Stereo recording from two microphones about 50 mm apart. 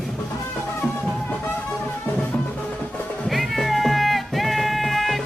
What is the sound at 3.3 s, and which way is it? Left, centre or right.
Cat, centre.